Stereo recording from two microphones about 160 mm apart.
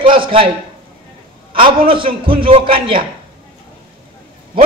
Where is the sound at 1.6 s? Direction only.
35° right (ahead or behind).